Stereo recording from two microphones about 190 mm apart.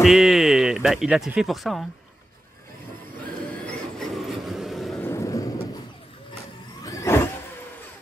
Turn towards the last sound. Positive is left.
turn(degrees=15)  # may be behind; listen again after turning